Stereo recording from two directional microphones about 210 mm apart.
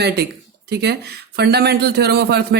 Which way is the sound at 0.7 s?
50° right (ahead or behind).